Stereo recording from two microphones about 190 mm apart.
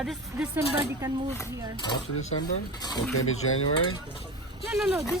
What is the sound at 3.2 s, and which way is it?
Speech, 90° left.